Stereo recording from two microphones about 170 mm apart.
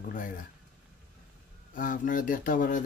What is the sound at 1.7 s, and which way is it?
Speech, 50° left (ahead or behind).